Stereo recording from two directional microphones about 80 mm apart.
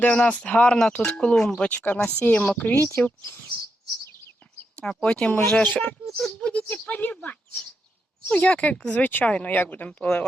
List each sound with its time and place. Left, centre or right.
0.0 s a woman's voice: centre
5.0 s a woman's voice: centre
6.1 s speech: centre
6.5 s speech: centre